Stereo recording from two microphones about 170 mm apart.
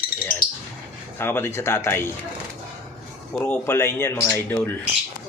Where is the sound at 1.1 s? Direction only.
15° left (ahead or behind).